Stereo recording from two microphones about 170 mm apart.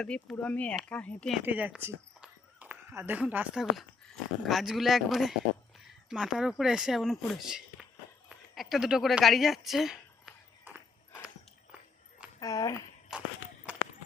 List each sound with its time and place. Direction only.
0.0 s speech: 5° left (ahead or behind)
1.5 s a woman's voice: 10° right (ahead or behind)
10.6 s walk: 10° right (ahead or behind)
12.4 s speech: 20° left (ahead or behind)
13.1 s walk: centre (ahead or behind)